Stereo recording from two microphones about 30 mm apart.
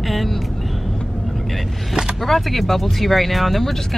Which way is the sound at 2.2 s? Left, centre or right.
Centre.